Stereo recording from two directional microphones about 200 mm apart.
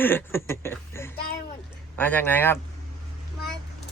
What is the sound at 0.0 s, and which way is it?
Speech, 10° left (ahead or behind).